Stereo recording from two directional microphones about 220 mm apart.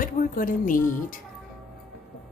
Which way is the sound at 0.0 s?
40° left (ahead or behind).